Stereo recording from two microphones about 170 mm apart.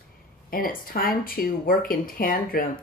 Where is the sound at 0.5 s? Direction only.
55° left (ahead or behind).